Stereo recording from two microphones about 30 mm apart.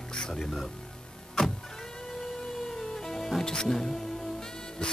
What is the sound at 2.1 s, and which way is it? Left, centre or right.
Music, centre.